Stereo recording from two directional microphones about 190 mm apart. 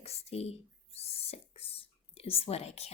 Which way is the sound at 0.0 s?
30° left (ahead or behind).